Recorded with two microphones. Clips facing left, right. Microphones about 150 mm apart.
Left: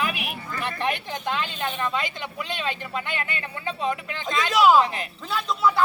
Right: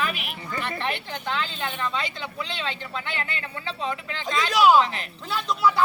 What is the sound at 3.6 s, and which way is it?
Speech, 20° left (ahead or behind).